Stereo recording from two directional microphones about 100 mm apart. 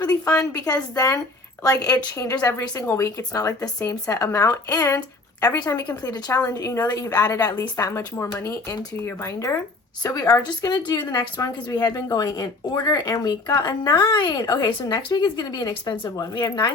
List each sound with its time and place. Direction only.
0.0 s a woman's voice: 35° left (ahead or behind)